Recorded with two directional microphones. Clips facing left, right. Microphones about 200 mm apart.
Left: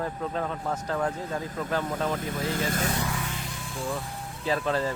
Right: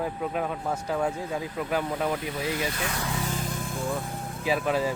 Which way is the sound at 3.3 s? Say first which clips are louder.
Right 5 dB; 45° right (ahead or behind).